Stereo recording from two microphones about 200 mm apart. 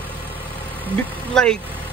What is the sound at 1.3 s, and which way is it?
Speech, 5° left (ahead or behind).